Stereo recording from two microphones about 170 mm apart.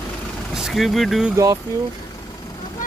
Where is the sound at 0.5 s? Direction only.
Centre (ahead or behind).